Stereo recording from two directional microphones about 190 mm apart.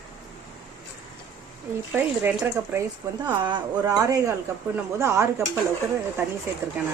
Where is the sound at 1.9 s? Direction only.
10° right (ahead or behind).